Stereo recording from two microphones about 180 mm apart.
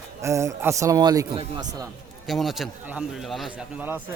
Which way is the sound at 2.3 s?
Centre (ahead or behind).